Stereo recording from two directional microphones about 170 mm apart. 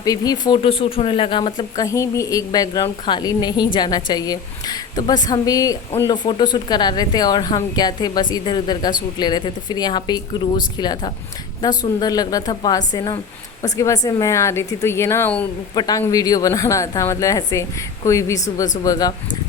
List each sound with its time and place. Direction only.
0.0 s a woman's voice: 20° left (ahead or behind)
15.7 s speech: 25° left (ahead or behind)